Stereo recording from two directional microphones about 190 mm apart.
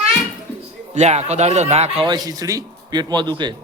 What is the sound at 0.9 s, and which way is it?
Speech, 35° right (ahead or behind).